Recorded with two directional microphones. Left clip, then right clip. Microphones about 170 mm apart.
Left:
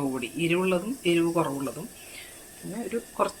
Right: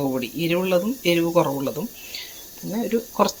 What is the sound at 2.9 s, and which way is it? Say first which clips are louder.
Speech: right 6 dB; 55° right (ahead or behind).